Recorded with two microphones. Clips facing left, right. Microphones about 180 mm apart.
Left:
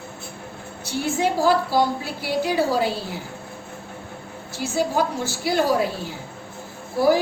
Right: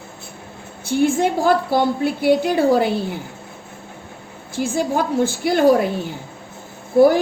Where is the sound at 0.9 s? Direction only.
50° right (ahead or behind).